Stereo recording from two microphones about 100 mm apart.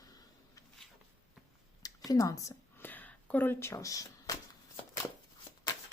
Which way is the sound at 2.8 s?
20° left (ahead or behind).